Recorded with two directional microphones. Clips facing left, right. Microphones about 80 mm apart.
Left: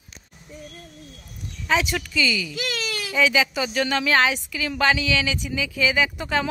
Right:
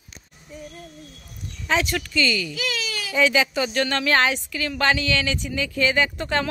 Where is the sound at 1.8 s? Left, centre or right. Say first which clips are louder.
Right 1 dB; centre.